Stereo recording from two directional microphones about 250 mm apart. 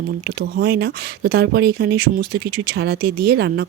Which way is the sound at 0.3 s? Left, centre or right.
Right.